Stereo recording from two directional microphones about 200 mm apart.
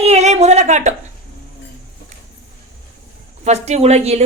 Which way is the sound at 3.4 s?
35° right (ahead or behind).